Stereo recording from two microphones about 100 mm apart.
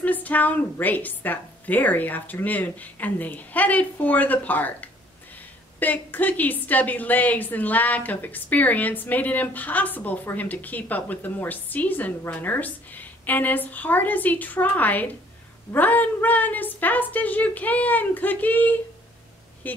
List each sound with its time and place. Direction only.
0.0 s a woman's voice: 15° left (ahead or behind)